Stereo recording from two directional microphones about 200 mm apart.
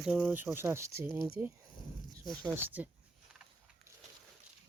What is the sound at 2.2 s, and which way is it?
Speech, 5° left (ahead or behind).